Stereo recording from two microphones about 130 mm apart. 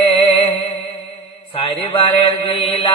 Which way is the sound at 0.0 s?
50° left (ahead or behind).